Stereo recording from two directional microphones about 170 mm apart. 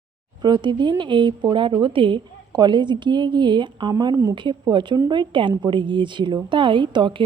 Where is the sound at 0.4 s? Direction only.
25° right (ahead or behind).